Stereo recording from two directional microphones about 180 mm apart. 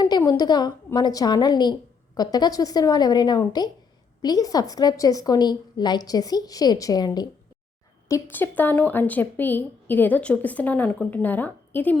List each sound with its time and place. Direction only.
0.0 s a woman's voice: 20° left (ahead or behind)